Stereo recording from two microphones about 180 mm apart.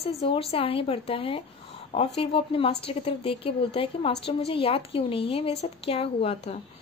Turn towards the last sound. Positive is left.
turn(degrees=35)  # may be behind; listen again after turning